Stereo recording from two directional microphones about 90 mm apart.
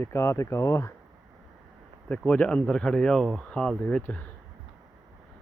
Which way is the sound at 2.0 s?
15° left (ahead or behind).